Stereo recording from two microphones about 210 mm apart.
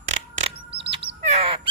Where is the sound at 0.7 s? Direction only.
25° right (ahead or behind).